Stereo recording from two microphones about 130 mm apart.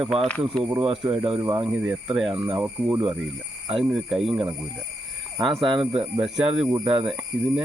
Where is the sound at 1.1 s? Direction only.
45° right (ahead or behind).